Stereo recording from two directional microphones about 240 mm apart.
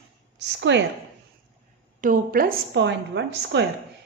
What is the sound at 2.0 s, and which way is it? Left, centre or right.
A woman's voice, right.